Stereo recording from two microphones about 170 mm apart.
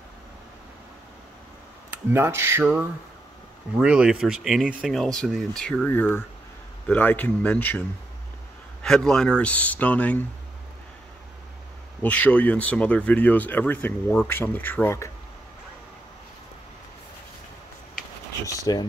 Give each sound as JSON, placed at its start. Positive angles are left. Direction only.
{"t": 1.9, "sound": "speech", "side_deg": -15}
{"t": 8.8, "sound": "speech", "side_deg": 5}
{"t": 12.0, "sound": "speech", "side_deg": 10}
{"t": 18.7, "sound": "speech", "side_deg": 25}